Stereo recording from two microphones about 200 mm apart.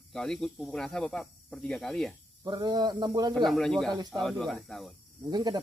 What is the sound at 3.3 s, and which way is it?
Speech, centre (ahead or behind).